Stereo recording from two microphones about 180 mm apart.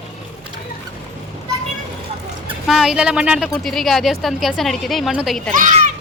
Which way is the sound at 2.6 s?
Centre (ahead or behind).